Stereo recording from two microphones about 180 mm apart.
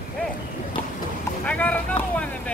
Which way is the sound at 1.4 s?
5° left (ahead or behind).